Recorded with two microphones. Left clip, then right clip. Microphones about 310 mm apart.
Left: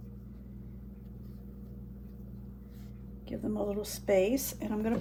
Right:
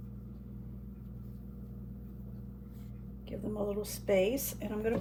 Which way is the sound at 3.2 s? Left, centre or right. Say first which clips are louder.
Left 2 dB; centre.